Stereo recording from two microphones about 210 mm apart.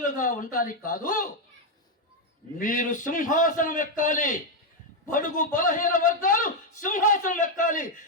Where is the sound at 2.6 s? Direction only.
40° left (ahead or behind).